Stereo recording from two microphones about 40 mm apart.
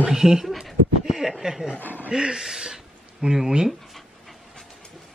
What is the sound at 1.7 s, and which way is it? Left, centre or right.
Speech, left.